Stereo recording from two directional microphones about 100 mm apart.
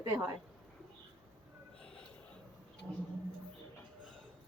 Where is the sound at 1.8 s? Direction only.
10° left (ahead or behind).